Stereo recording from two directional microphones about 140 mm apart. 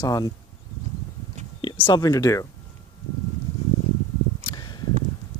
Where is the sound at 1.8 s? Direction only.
30° left (ahead or behind).